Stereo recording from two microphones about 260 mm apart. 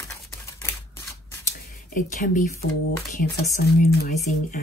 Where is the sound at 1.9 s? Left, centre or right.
Left.